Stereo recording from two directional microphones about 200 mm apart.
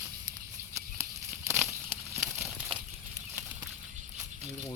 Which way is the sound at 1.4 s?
Centre (ahead or behind).